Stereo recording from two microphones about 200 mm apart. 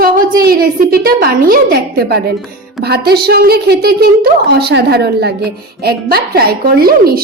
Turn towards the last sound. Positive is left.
turn(degrees=-50)  # may be behind; listen again after turning